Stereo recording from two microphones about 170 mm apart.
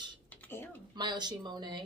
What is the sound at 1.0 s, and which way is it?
Speech, 25° right (ahead or behind).